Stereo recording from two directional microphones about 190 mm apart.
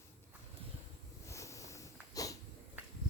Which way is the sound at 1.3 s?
15° left (ahead or behind).